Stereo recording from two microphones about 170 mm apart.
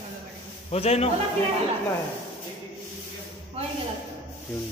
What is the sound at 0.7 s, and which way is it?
Speech, 35° left (ahead or behind).